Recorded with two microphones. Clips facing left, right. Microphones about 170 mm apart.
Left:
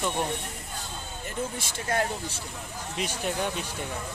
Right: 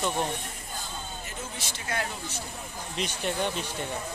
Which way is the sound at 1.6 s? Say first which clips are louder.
Left 3 dB; 50° left (ahead or behind).